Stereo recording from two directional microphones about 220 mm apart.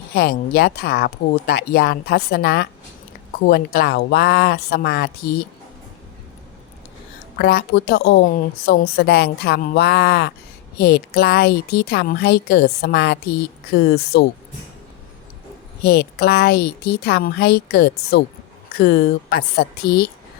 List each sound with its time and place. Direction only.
0.1 s a woman's voice: 45° left (ahead or behind)
7.3 s a woman's voice: 45° left (ahead or behind)
15.8 s a woman's voice: 45° left (ahead or behind)